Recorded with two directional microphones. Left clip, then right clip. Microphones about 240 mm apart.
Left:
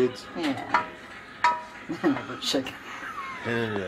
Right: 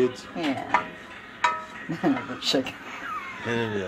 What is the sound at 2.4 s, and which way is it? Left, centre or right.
Speech, right.